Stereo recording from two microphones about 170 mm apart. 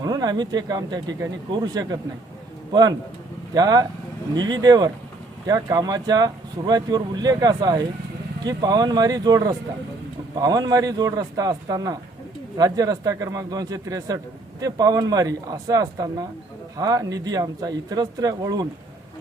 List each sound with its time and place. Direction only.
0.0 s speech: 25° right (ahead or behind)
3.5 s speech: 20° right (ahead or behind)